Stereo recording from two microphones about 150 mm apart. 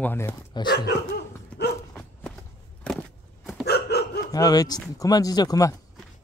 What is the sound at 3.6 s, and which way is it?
Dog, 90° left.